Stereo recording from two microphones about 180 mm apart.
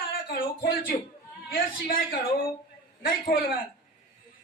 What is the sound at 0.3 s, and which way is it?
Speech, 55° left (ahead or behind).